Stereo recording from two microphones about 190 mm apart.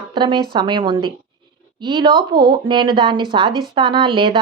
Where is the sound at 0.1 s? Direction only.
25° right (ahead or behind).